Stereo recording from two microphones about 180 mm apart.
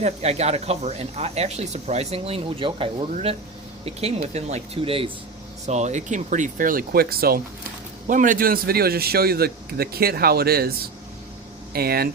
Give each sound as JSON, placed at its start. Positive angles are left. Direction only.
{"t": 0.0, "sound": "speech", "side_deg": -35}
{"t": 4.4, "sound": "a man's voice", "side_deg": -35}